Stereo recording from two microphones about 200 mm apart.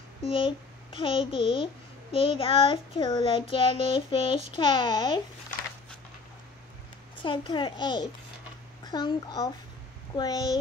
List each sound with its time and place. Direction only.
0.2 s a child's voice: 25° left (ahead or behind)
2.1 s child singing: 25° left (ahead or behind)
7.2 s child singing: 25° left (ahead or behind)